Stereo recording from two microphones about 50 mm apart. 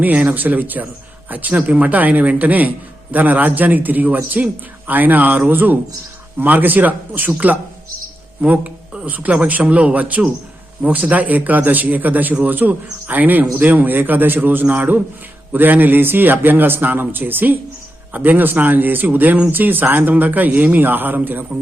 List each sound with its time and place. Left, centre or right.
0.0 s a man's voice: right
9.0 s a man's voice: right